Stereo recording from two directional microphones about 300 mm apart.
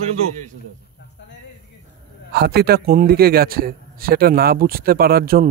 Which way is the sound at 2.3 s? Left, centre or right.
Right.